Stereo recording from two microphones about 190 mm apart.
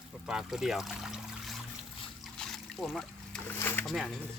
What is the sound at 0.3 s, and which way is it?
Speech, 5° right (ahead or behind).